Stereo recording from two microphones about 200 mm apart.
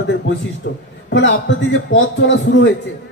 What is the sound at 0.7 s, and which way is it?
A man's voice, 60° left (ahead or behind).